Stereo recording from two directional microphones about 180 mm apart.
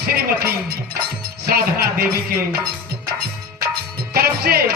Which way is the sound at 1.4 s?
60° right (ahead or behind).